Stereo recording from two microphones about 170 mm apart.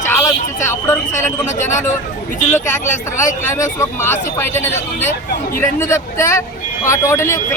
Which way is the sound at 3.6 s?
15° left (ahead or behind).